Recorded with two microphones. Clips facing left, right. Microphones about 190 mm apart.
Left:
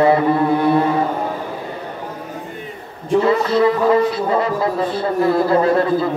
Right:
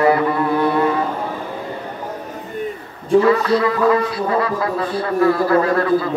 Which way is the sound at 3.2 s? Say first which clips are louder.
Left 1 dB; 25° left (ahead or behind).